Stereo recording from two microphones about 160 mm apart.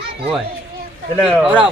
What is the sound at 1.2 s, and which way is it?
Speech, 5° left (ahead or behind).